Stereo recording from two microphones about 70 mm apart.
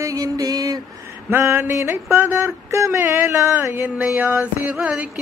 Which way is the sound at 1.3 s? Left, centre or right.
Right.